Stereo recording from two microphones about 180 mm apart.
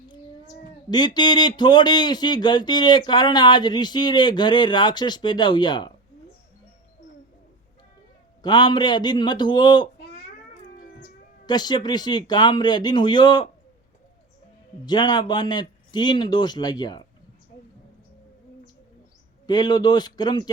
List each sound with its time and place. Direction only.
0.9 s speech: 25° left (ahead or behind)
8.4 s speech: 25° left (ahead or behind)
11.4 s speech: 25° left (ahead or behind)
14.8 s speech: 25° left (ahead or behind)
19.5 s speech: 25° left (ahead or behind)